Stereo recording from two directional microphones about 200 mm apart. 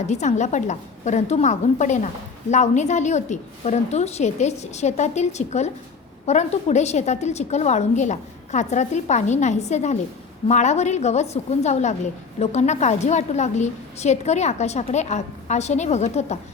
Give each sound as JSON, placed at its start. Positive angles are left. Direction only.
{"t": 0.1, "sound": "a woman's voice", "side_deg": 35}